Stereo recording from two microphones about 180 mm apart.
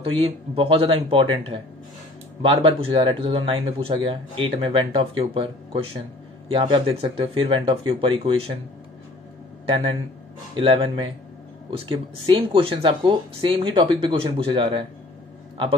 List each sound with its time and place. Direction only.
0.0 s speech: 30° right (ahead or behind)
9.7 s speech: 30° right (ahead or behind)